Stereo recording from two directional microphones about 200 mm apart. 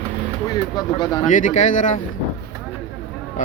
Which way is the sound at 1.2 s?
40° left (ahead or behind).